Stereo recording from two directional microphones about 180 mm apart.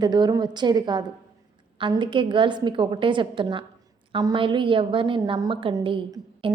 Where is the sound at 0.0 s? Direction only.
25° right (ahead or behind).